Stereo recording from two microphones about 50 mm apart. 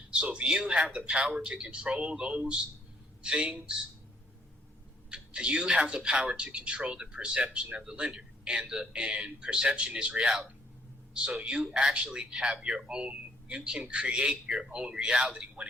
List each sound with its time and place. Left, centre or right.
0.1 s speech: right
5.0 s speech: centre